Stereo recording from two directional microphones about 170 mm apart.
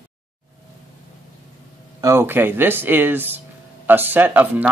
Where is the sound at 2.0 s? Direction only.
15° right (ahead or behind).